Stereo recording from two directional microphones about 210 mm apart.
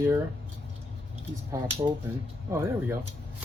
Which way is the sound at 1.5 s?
15° right (ahead or behind).